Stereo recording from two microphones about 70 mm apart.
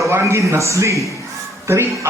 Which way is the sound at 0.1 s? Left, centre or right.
Right.